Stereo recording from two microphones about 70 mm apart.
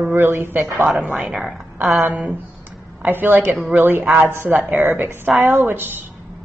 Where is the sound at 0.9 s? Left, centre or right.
Right.